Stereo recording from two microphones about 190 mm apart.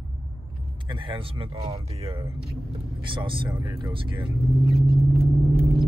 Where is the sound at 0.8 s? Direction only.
25° right (ahead or behind).